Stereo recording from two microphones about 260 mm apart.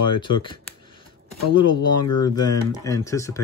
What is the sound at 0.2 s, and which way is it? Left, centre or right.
Speech, centre.